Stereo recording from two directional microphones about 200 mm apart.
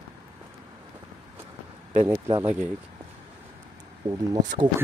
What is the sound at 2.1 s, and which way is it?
Speech, 20° right (ahead or behind).